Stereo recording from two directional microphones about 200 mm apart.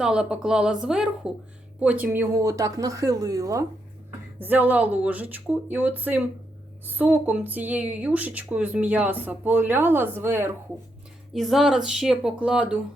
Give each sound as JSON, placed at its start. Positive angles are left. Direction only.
{"t": 0.0, "sound": "speech", "side_deg": -5}
{"t": 11.3, "sound": "speech", "side_deg": 0}